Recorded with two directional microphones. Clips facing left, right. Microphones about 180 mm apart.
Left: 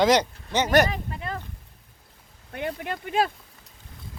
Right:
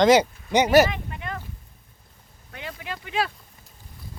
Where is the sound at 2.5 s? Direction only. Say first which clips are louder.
Left 5 dB; 55° left (ahead or behind).